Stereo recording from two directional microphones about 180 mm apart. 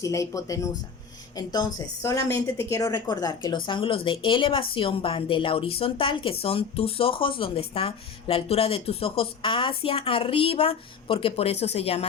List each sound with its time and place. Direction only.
0.0 s a woman's voice: 20° left (ahead or behind); by 12.0 s 35° left (ahead or behind)